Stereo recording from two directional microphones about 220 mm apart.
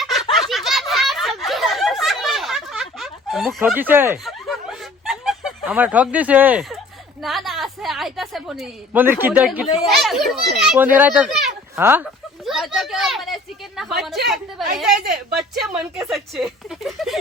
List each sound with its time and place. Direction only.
0.0 s snicker: centre (ahead or behind)
5.0 s a woman's voice: centre (ahead or behind)
12.5 s a sound: centre (ahead or behind)
14.3 s chatter: centre (ahead or behind)
14.9 s speech: 45° right (ahead or behind)
15.6 s a woman's voice: 5° right (ahead or behind)